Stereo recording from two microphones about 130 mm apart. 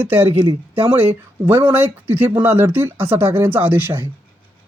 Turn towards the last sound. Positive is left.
turn(degrees=-15)  # may be behind; listen again after turning